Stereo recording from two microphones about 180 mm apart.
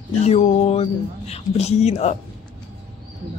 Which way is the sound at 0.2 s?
40° left (ahead or behind).